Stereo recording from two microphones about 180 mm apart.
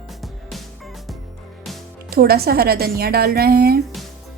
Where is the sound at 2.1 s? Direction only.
55° right (ahead or behind).